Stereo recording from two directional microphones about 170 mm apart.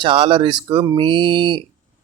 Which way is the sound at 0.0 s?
30° right (ahead or behind).